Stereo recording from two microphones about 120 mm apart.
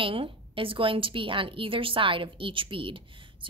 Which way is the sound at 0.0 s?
45° right (ahead or behind).